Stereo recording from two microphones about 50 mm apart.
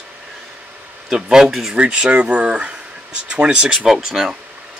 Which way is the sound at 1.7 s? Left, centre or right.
Right.